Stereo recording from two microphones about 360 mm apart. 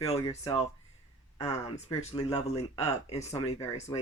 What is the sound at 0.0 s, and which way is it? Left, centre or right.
Speech, centre.